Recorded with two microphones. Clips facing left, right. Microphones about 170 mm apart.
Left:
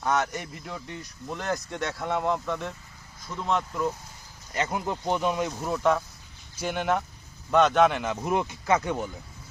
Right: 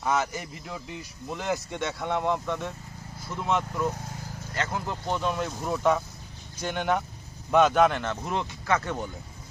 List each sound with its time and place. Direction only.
0.0 s speech: 5° right (ahead or behind)
4.5 s speech: 15° left (ahead or behind)
5.6 s speech: centre (ahead or behind)
8.2 s speech: 15° left (ahead or behind)